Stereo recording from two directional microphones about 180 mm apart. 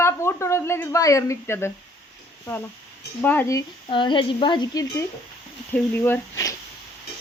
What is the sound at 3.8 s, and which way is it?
Speech, 25° left (ahead or behind).